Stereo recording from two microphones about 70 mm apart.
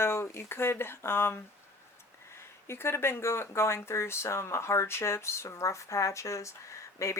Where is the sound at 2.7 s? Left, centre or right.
Left.